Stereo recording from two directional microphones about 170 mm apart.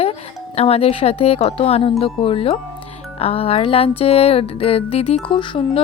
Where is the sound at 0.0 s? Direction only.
35° left (ahead or behind).